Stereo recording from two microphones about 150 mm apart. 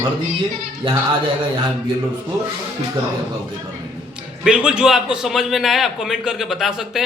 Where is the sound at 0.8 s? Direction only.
35° right (ahead or behind).